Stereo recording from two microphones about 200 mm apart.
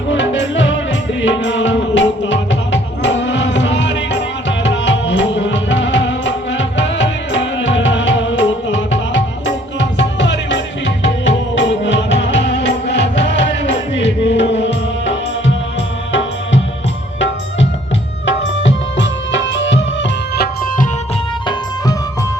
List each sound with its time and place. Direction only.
0.1 s music: 65° left (ahead or behind)
18.3 s music: 65° left (ahead or behind)